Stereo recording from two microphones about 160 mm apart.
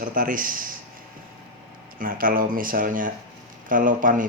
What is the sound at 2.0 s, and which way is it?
Speech, 60° right (ahead or behind).